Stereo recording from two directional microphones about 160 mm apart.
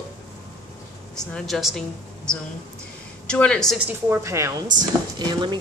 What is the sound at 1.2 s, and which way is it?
Speech, centre (ahead or behind).